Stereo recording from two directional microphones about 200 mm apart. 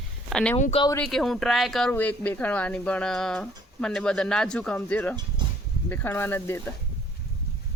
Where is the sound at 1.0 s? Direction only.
Centre (ahead or behind).